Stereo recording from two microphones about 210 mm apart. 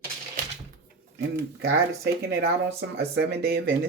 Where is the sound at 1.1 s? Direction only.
55° right (ahead or behind).